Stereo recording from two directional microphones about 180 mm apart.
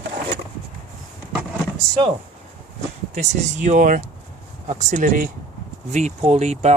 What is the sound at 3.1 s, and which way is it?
Speech, 40° right (ahead or behind).